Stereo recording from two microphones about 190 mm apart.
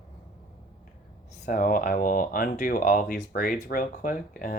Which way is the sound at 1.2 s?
40° left (ahead or behind).